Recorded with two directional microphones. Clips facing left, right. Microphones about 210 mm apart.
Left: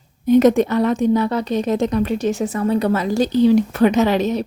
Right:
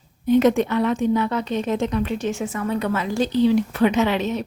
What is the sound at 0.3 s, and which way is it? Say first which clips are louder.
A woman's voice: left 4 dB; 40° left (ahead or behind).